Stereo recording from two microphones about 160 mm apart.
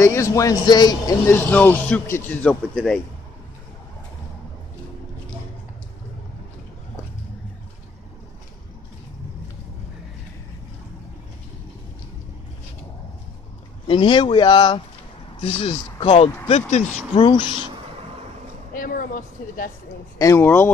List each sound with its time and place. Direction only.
0.0 s speech: 20° left (ahead or behind)
13.8 s speech: 30° left (ahead or behind)
15.4 s speech: 40° left (ahead or behind)
16.7 s speech: 45° left (ahead or behind)
17.1 s speech: 30° left (ahead or behind)
18.7 s speech: 60° left (ahead or behind)
20.2 s speech: 15° left (ahead or behind)